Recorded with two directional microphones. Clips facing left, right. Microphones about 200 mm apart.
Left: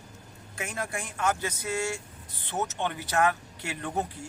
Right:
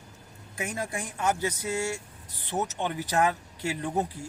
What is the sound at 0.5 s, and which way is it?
A man's voice, 15° right (ahead or behind).